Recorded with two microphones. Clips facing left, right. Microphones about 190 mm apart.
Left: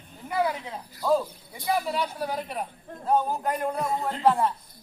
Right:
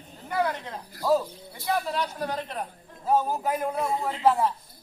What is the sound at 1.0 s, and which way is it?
Speech, 5° right (ahead or behind).